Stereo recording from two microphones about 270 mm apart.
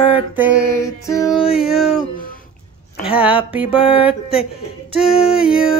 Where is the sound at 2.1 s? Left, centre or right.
Left.